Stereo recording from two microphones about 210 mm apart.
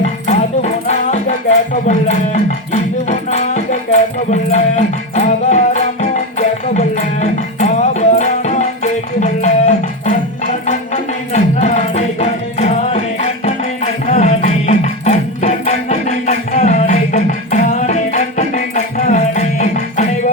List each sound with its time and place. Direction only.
0.0 s music: 30° left (ahead or behind)